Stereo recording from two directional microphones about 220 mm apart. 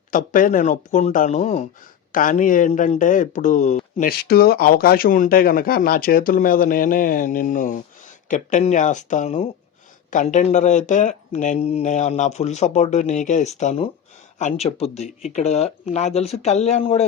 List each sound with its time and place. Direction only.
0.1 s speech: 35° left (ahead or behind)
4.2 s speech: 45° left (ahead or behind); by 17.1 s 30° left (ahead or behind)